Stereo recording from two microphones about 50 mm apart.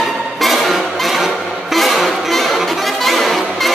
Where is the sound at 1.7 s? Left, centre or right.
Centre.